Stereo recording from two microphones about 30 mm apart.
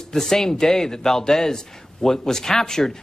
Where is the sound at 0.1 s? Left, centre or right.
Centre.